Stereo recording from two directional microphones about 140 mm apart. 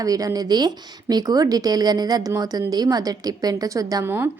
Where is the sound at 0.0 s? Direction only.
25° right (ahead or behind).